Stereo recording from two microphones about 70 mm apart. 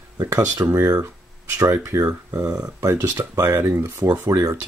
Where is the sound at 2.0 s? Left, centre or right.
Right.